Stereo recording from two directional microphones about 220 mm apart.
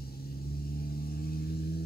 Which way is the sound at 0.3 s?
45° left (ahead or behind).